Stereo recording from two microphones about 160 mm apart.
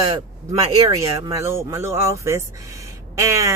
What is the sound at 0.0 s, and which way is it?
Speech, 25° right (ahead or behind).